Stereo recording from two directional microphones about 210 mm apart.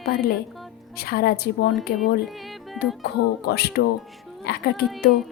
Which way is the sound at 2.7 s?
50° left (ahead or behind).